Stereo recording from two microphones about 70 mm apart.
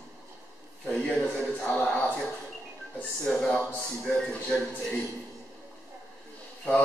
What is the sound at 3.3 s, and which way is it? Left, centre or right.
Speech, centre.